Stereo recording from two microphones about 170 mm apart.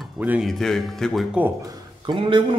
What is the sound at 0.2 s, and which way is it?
Speech, 10° right (ahead or behind).